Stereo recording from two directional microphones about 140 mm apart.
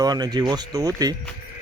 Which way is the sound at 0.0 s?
30° right (ahead or behind).